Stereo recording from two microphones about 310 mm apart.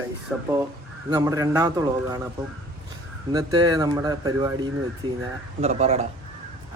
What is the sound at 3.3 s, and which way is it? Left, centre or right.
A man's voice, centre.